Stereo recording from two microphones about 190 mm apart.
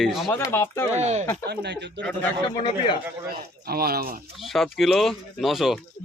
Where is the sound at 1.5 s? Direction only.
60° right (ahead or behind).